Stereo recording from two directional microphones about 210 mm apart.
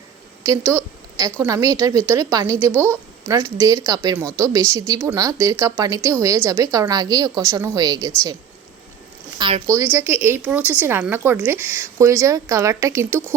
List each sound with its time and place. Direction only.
1.2 s a woman's voice: 15° right (ahead or behind)
9.4 s a woman's voice: 20° right (ahead or behind)